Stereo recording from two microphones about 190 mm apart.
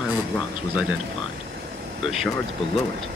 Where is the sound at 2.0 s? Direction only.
Centre (ahead or behind).